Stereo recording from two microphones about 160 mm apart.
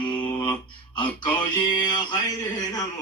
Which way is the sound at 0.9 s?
30° left (ahead or behind).